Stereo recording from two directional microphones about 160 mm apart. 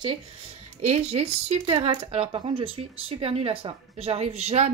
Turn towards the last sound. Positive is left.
turn(degrees=-45)  # may be behind; listen again after turning